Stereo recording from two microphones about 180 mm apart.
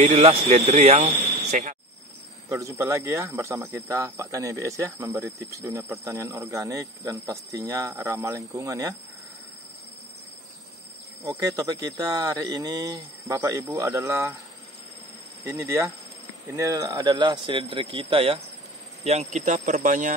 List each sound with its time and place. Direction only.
0.0 s speech: 35° right (ahead or behind)
2.5 s speech: 15° right (ahead or behind)
11.2 s speech: 20° right (ahead or behind)
15.5 s speech: 15° right (ahead or behind); by 20.2 s 45° right (ahead or behind)